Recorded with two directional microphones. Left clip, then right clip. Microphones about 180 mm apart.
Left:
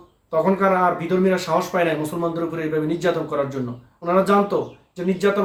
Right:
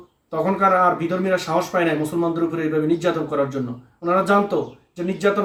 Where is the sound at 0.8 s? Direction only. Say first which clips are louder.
Even; 15° left (ahead or behind).